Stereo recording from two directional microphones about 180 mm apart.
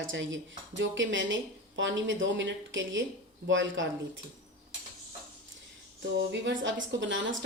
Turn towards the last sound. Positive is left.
turn(degrees=-90)